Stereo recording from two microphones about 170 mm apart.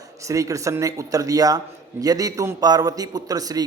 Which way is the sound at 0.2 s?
20° right (ahead or behind).